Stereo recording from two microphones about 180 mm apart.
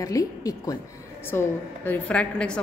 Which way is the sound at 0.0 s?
20° left (ahead or behind).